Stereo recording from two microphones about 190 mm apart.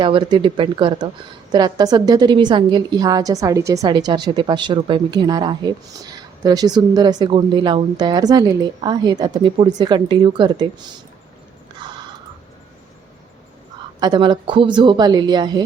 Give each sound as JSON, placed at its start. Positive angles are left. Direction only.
{"t": 0.0, "sound": "a woman's voice", "side_deg": -25}
{"t": 14.0, "sound": "a woman's voice", "side_deg": -25}